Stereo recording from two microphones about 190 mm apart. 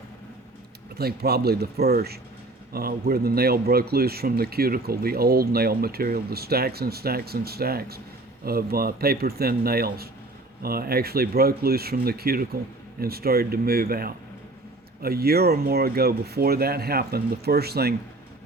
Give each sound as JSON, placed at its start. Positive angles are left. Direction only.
{"t": 0.9, "sound": "speech", "side_deg": -55}